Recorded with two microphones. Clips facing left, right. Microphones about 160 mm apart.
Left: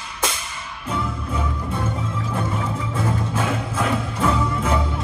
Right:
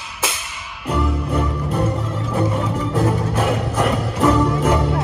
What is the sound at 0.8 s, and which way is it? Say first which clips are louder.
Music: right 6 dB; 70° right (ahead or behind).